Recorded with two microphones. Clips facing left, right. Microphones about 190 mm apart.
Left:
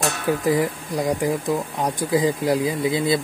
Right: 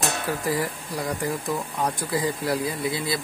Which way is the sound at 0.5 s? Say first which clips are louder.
Left 6 dB; 15° left (ahead or behind).